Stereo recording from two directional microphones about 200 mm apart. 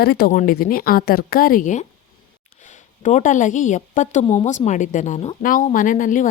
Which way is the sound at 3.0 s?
40° left (ahead or behind).